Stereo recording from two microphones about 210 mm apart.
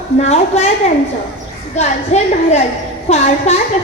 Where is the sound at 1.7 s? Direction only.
30° left (ahead or behind).